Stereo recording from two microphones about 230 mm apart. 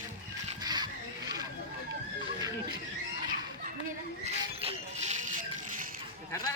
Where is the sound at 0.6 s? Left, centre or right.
Centre.